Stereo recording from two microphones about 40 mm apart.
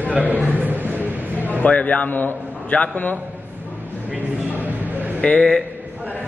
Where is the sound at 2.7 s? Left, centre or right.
Left.